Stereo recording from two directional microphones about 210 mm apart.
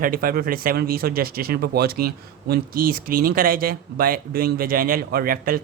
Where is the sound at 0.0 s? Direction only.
40° right (ahead or behind).